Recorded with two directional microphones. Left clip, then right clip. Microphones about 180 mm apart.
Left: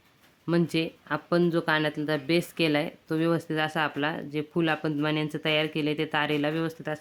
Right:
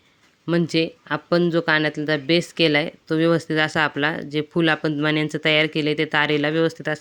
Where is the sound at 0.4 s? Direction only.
20° right (ahead or behind).